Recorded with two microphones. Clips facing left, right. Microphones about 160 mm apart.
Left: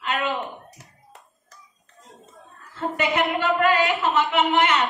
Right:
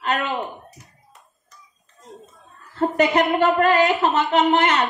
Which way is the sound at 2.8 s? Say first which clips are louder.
Right 5 dB; 40° right (ahead or behind).